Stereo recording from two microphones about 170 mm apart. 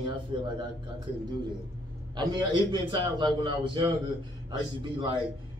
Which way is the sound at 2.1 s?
25° right (ahead or behind).